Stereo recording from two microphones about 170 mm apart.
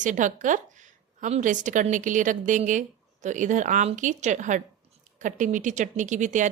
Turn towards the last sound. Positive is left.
turn(degrees=-45)  # may be behind; listen again after turning